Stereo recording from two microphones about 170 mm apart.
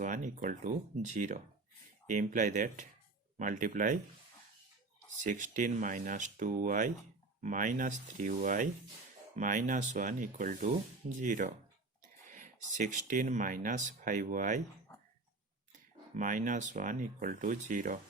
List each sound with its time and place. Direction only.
0.0 s speech: 45° right (ahead or behind)
5.2 s speech: 50° right (ahead or behind)
16.1 s speech: 50° right (ahead or behind)